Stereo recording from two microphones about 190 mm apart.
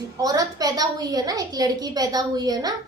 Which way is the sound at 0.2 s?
20° right (ahead or behind).